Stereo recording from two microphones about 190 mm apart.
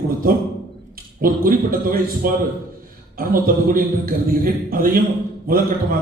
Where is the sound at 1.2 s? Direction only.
50° right (ahead or behind).